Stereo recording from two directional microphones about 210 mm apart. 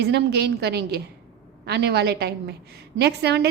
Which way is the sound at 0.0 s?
50° right (ahead or behind).